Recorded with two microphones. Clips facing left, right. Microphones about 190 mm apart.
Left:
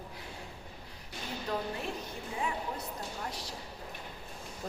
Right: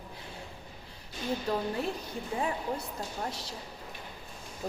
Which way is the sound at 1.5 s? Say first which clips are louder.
Right 2 dB; 35° right (ahead or behind).